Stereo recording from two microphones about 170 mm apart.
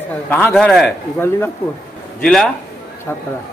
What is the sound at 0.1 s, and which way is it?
A man's voice, 10° left (ahead or behind).